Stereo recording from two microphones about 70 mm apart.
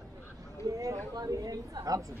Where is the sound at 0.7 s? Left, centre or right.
Right.